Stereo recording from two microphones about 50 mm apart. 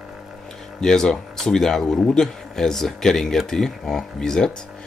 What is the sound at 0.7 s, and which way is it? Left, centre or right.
Speech, centre.